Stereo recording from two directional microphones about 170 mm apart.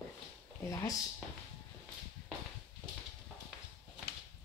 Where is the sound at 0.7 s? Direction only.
20° left (ahead or behind).